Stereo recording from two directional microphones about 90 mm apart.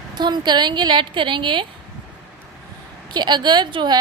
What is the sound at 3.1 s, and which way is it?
Speech, 55° right (ahead or behind).